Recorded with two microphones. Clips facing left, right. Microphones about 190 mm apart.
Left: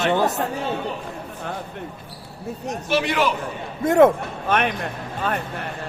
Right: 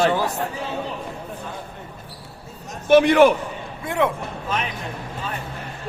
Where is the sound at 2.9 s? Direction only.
55° right (ahead or behind).